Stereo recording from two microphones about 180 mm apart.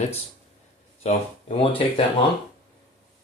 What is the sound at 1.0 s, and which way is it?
Speech, 35° left (ahead or behind).